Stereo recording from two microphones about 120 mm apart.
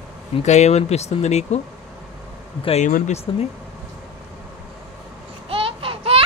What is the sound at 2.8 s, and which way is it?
Speech, 70° left (ahead or behind).